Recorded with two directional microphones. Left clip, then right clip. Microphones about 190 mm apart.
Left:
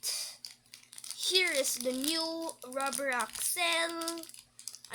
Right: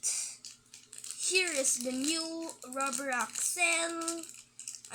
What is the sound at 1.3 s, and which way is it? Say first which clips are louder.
Speech: left 1 dB; 50° left (ahead or behind).